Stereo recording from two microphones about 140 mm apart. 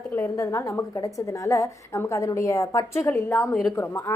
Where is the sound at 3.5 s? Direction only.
Centre (ahead or behind).